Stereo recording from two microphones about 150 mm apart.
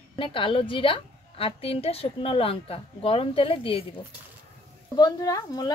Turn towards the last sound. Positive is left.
turn(degrees=25)  # may be behind; listen again after turning